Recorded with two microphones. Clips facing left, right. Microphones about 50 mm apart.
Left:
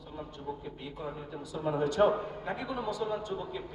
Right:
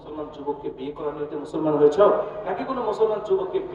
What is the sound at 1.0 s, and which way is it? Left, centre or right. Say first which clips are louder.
A man's voice: right 10 dB; right.